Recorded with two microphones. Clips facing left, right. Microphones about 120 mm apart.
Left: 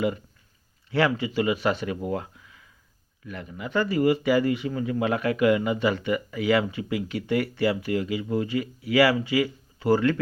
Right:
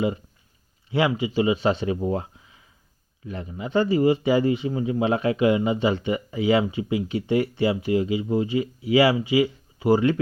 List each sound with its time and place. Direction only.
0.9 s speech: 20° right (ahead or behind)